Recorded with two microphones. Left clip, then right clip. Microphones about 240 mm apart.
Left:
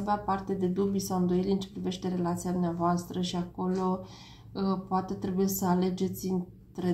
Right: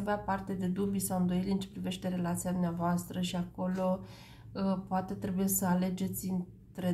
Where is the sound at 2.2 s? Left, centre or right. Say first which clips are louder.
Left 5 dB; right.